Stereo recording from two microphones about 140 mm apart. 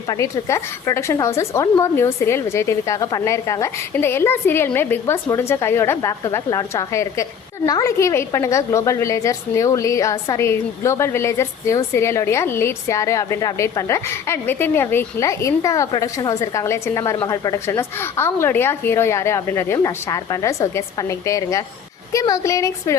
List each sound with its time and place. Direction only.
0.1 s a woman's voice: 20° left (ahead or behind)